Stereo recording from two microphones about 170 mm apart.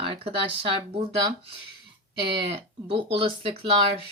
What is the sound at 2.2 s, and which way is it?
Speech, 30° right (ahead or behind).